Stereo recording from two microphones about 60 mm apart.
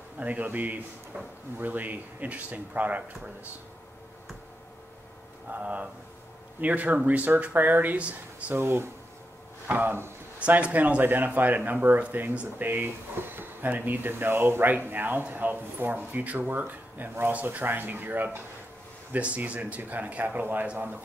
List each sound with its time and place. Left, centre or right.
0.2 s speech: right
5.5 s speech: right
8.5 s speech: right
10.4 s speech: right